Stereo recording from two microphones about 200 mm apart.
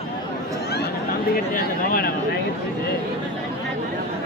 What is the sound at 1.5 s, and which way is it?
Speech, 45° left (ahead or behind).